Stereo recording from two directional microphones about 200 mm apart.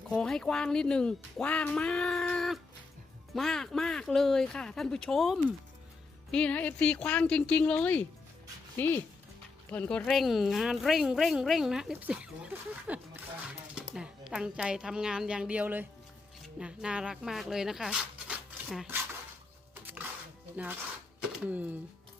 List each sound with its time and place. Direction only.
0.1 s a woman's voice: 5° left (ahead or behind)
19.8 s music: 10° right (ahead or behind)
21.2 s speech: 5° right (ahead or behind)